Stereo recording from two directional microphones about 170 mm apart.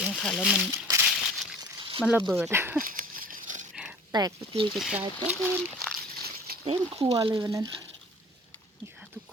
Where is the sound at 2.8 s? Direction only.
55° right (ahead or behind).